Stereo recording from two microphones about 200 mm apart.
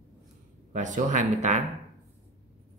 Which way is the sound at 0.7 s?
40° right (ahead or behind).